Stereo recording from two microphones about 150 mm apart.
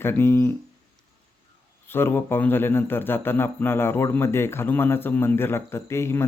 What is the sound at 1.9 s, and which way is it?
A man's voice, 15° left (ahead or behind).